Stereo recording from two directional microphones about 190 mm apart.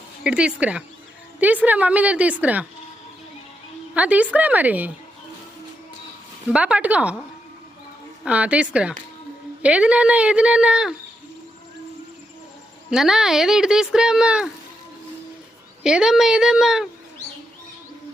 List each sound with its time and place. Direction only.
0.2 s a woman's voice: 5° right (ahead or behind)
3.9 s a woman's voice: 5° right (ahead or behind)
6.5 s a woman's voice: 5° right (ahead or behind)
8.2 s a woman's voice: 5° right (ahead or behind)
12.9 s speech: centre (ahead or behind)
15.8 s speech: 5° right (ahead or behind)